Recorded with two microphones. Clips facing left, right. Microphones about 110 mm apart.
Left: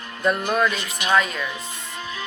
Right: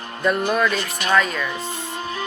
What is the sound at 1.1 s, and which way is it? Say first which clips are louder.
Speech: right 1 dB; 10° left (ahead or behind).